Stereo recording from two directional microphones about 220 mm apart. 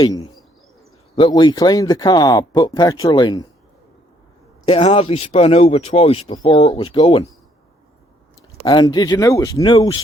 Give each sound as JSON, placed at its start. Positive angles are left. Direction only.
{"t": 0.0, "sound": "bird", "side_deg": 15}
{"t": 1.1, "sound": "speech", "side_deg": 20}
{"t": 4.6, "sound": "speech", "side_deg": 25}
{"t": 8.6, "sound": "speech", "side_deg": 20}